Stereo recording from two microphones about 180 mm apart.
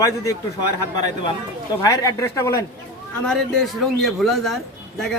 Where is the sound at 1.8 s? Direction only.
20° left (ahead or behind).